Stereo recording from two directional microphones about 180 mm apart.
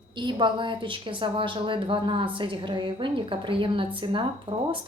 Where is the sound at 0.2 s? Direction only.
25° right (ahead or behind).